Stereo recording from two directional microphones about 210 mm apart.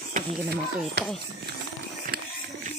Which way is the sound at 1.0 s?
50° right (ahead or behind).